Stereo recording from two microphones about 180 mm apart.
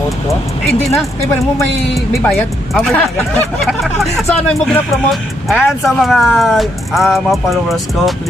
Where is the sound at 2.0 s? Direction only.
Centre (ahead or behind).